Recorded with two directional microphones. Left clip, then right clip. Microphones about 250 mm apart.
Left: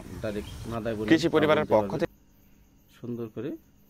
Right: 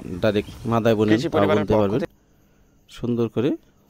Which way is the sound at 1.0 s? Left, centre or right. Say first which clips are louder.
Right 3 dB; centre.